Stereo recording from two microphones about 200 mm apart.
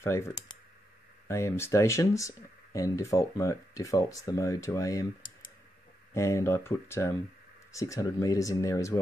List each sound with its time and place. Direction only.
0.0 s speech: 15° left (ahead or behind)
6.1 s speech: 15° left (ahead or behind)